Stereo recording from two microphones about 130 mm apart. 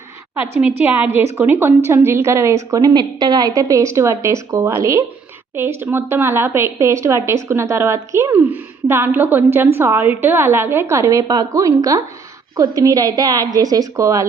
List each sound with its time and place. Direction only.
0.3 s a woman's voice: 15° right (ahead or behind)